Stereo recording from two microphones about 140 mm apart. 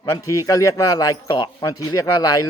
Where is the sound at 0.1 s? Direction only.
25° left (ahead or behind).